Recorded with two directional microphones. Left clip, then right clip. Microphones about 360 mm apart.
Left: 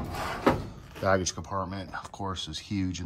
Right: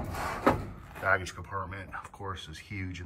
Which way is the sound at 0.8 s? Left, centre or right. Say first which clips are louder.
Left 2 dB; centre.